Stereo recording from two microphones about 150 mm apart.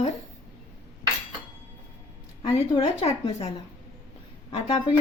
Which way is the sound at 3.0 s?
40° left (ahead or behind).